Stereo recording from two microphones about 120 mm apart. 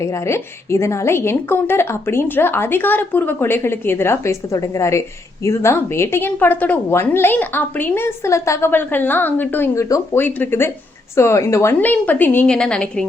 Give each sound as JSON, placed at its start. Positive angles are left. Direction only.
{"t": 0.0, "sound": "a woman's voice", "side_deg": 25}